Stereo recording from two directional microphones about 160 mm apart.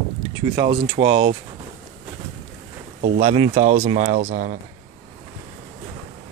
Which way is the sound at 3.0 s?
45° right (ahead or behind).